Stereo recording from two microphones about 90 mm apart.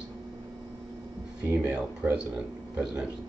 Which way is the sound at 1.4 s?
25° right (ahead or behind).